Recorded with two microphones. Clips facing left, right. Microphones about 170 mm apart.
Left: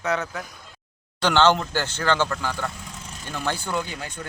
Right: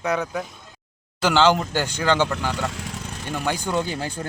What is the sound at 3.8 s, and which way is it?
Speech, 30° right (ahead or behind).